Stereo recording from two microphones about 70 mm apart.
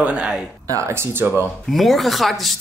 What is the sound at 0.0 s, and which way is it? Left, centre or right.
Speech, centre.